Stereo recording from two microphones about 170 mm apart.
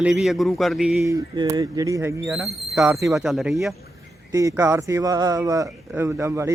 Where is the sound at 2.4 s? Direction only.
Centre (ahead or behind).